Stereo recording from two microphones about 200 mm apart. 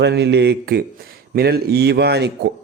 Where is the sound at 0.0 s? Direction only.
60° right (ahead or behind).